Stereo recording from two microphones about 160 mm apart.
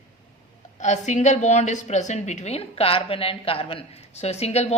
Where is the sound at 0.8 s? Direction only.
45° left (ahead or behind).